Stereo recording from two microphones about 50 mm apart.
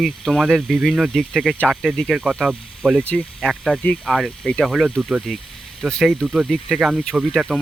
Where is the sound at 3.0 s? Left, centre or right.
Left.